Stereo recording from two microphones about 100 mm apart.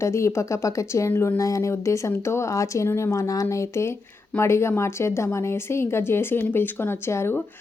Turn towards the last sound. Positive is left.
turn(degrees=25)  # may be behind; listen again after turning